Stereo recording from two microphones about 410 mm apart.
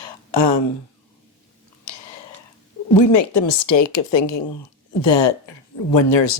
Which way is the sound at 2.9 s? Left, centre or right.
Left.